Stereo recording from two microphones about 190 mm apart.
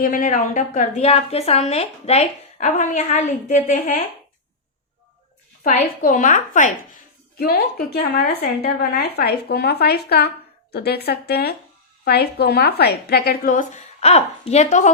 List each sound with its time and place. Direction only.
0.0 s a woman's voice: 45° left (ahead or behind)
5.6 s a woman's voice: 45° left (ahead or behind)